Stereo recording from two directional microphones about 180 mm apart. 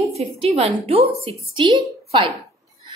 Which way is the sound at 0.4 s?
35° right (ahead or behind).